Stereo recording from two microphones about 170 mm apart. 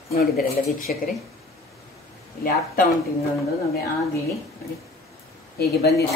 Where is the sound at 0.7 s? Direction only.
55° left (ahead or behind).